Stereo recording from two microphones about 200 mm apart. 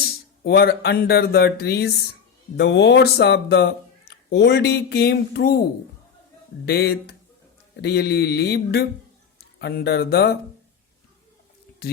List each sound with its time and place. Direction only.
0.4 s speech: 55° left (ahead or behind)
6.7 s speech: 55° left (ahead or behind)